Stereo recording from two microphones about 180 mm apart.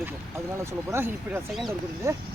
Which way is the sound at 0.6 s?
15° right (ahead or behind).